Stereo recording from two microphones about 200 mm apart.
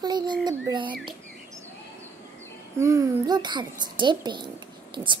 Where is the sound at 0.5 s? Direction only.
20° right (ahead or behind).